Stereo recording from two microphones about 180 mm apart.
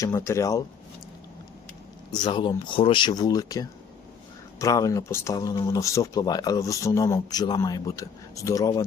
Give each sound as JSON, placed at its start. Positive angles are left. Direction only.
{"t": 0.0, "sound": "speech", "side_deg": 15}
{"t": 2.1, "sound": "speech", "side_deg": 25}